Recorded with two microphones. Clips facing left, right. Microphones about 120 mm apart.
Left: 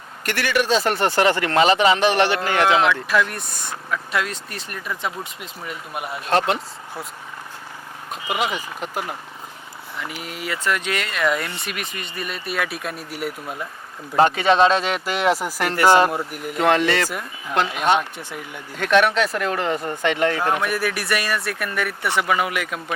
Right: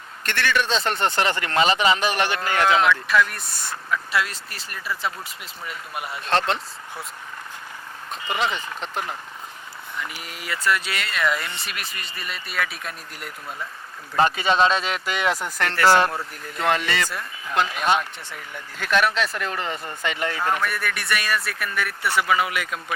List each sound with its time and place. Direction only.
0.8 s speech: 25° right (ahead or behind)
1.1 s a man's voice: 15° left (ahead or behind)
2.7 s speech: 5° left (ahead or behind)
8.1 s speech: 10° left (ahead or behind)
10.8 s speech: centre (ahead or behind)
16.6 s a man's voice: centre (ahead or behind); by 18.6 s 20° left (ahead or behind)
18.8 s speech: centre (ahead or behind)
22.2 s speech: 15° left (ahead or behind)